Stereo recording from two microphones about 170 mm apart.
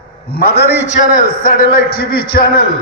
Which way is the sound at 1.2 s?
55° left (ahead or behind).